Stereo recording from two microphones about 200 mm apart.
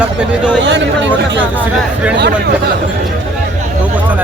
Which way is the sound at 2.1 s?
55° right (ahead or behind).